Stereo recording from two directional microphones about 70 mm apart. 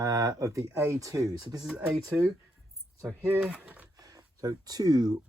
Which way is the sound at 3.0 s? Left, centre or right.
Right.